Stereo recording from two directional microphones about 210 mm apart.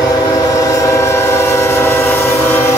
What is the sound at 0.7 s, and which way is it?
Train, 15° left (ahead or behind).